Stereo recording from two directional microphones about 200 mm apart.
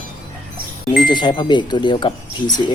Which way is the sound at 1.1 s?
20° left (ahead or behind).